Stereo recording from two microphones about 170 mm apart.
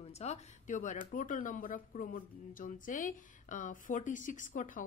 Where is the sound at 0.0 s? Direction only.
40° left (ahead or behind).